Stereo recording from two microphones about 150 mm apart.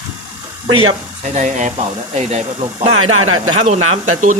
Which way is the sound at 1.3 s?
55° right (ahead or behind).